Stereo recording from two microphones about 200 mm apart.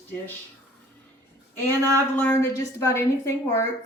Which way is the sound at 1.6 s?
10° left (ahead or behind).